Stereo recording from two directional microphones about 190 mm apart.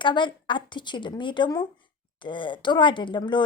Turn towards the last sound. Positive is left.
turn(degrees=25)  # may be behind; listen again after turning